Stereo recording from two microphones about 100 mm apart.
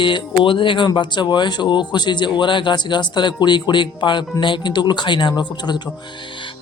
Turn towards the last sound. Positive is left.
turn(degrees=50)  # may be behind; listen again after turning